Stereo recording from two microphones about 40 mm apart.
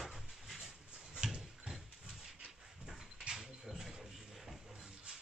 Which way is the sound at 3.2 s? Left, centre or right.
Centre.